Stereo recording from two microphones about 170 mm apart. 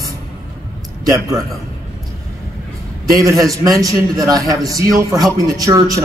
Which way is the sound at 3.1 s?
20° right (ahead or behind).